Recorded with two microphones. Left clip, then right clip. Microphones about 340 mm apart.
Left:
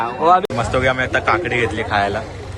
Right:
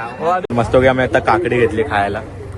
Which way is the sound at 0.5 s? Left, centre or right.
Centre.